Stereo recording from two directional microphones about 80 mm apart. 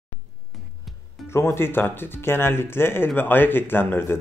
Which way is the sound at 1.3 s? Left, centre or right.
Left.